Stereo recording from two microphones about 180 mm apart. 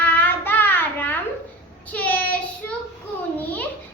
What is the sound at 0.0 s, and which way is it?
Child singing, 10° left (ahead or behind).